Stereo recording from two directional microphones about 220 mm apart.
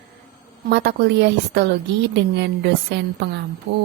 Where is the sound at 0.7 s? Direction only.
50° right (ahead or behind).